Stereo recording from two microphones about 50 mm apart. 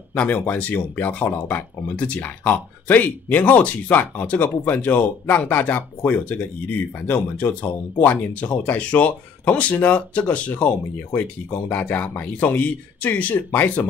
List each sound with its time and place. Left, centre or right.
0.1 s speech: left